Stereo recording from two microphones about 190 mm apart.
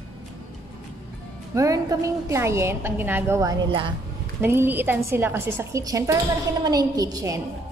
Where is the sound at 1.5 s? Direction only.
15° right (ahead or behind).